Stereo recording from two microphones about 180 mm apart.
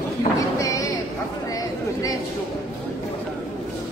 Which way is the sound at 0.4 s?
20° left (ahead or behind).